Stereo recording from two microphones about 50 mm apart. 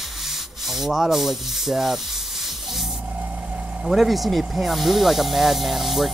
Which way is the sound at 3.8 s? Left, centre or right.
Centre.